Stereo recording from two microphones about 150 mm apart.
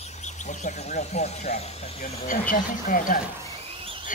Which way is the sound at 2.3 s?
65° left (ahead or behind).